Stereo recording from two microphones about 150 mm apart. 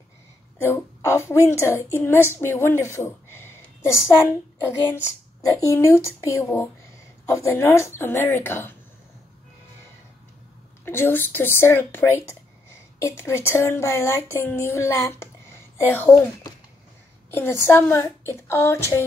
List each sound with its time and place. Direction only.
0.6 s a woman's voice: 15° left (ahead or behind)
10.9 s a woman's voice: 15° left (ahead or behind)
17.3 s a woman's voice: 15° left (ahead or behind)